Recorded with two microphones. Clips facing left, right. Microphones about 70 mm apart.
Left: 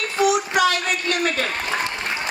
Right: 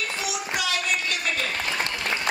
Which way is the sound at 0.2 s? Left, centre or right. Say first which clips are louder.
Left 15 dB; left.